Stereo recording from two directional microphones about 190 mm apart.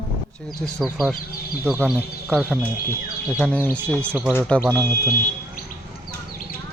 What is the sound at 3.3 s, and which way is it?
Speech, 10° left (ahead or behind).